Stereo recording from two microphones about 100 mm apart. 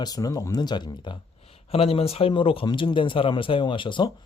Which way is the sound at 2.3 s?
60° left (ahead or behind).